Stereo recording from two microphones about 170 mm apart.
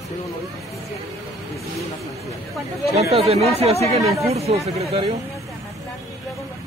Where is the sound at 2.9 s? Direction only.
35° right (ahead or behind).